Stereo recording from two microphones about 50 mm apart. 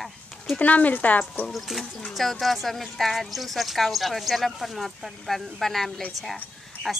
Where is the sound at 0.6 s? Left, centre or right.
Left.